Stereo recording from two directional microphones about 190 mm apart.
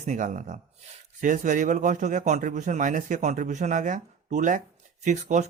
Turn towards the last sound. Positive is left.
turn(degrees=-40)  # may be behind; listen again after turning